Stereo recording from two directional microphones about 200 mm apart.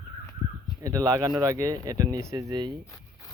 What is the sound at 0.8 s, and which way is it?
Speech, 15° right (ahead or behind).